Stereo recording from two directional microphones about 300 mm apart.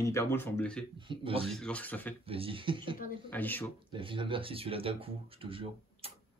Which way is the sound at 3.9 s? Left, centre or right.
Centre.